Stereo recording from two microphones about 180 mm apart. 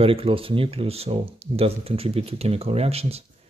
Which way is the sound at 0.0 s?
30° right (ahead or behind).